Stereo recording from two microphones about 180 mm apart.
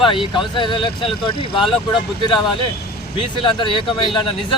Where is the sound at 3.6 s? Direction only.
30° left (ahead or behind).